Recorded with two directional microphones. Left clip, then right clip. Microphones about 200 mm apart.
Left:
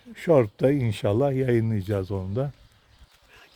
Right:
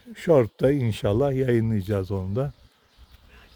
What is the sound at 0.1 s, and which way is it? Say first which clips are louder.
Speech: right 1 dB; 10° right (ahead or behind).